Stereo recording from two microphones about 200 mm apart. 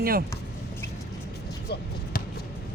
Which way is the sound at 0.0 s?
50° right (ahead or behind).